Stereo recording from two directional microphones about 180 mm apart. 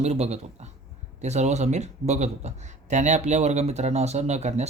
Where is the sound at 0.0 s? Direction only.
35° right (ahead or behind).